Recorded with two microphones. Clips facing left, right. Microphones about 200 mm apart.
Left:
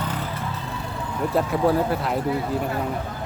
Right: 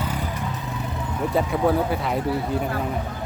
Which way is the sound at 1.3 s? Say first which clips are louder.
Even; centre (ahead or behind).